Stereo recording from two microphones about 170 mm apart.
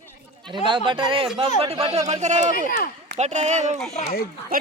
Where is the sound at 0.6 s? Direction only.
30° right (ahead or behind).